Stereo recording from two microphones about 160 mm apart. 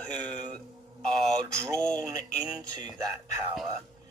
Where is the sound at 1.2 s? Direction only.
5° left (ahead or behind).